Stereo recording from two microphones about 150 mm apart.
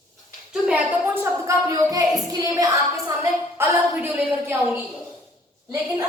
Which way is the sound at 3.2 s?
15° right (ahead or behind).